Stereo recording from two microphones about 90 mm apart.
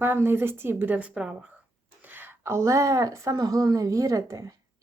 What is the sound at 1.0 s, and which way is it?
Speech, 10° right (ahead or behind).